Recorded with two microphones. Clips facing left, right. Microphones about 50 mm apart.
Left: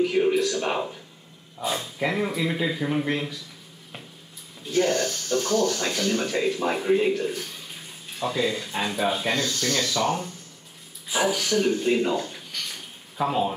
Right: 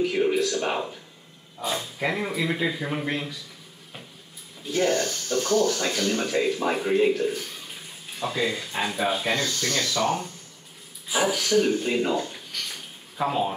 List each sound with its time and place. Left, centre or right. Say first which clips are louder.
0.0 s a sound: left 1 dB; centre
1.6 s speech: left 1 dB; centre
4.6 s speech: left 1 dB; centre